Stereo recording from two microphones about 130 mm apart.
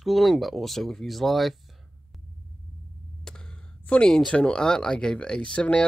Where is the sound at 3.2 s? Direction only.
5° left (ahead or behind).